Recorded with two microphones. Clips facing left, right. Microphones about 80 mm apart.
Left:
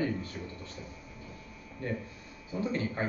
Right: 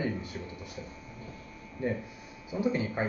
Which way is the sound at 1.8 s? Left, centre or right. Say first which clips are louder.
Right 4 dB; centre.